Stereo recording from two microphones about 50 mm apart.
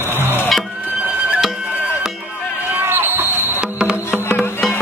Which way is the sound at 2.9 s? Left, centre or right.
Right.